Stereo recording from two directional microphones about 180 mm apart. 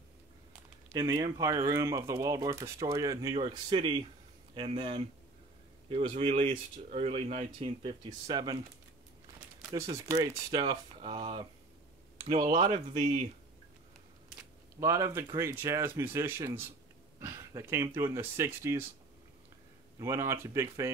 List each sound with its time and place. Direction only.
0.9 s speech: 20° right (ahead or behind)
9.7 s speech: 20° right (ahead or behind)
12.4 s speech: 30° right (ahead or behind)
14.3 s a sound: 15° right (ahead or behind)
15.3 s speech: 15° right (ahead or behind)
20.0 s speech: 15° right (ahead or behind)